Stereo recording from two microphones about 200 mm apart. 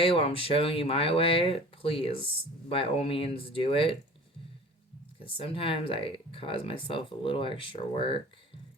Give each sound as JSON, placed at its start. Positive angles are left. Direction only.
{"t": 0.0, "sound": "speech", "side_deg": 30}
{"t": 5.4, "sound": "speech", "side_deg": 25}